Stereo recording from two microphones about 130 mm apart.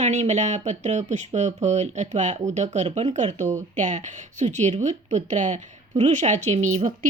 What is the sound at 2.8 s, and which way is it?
A woman's voice, 55° right (ahead or behind).